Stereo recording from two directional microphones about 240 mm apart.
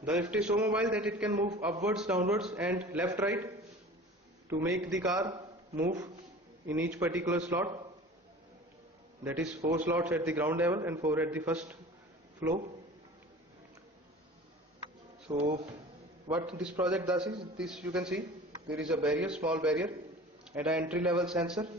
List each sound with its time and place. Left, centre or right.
0.0 s a man's voice: centre
4.5 s a man's voice: centre
9.2 s a man's voice: centre
15.3 s a man's voice: centre
16.3 s a man's voice: centre